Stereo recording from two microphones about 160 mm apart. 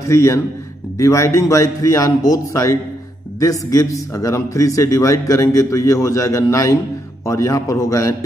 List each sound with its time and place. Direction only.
0.1 s a man's voice: 15° left (ahead or behind)